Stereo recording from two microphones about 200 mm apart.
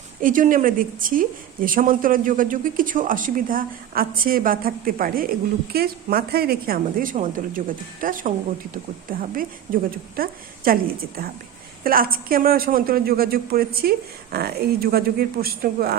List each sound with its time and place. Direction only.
0.2 s a woman's voice: 40° right (ahead or behind)